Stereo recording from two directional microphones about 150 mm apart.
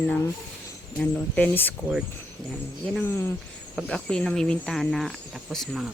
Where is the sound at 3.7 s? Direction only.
5° left (ahead or behind).